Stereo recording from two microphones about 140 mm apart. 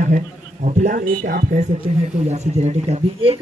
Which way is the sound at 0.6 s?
75° right (ahead or behind).